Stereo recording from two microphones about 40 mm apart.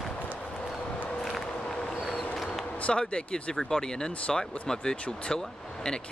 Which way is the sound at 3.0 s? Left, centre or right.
Left.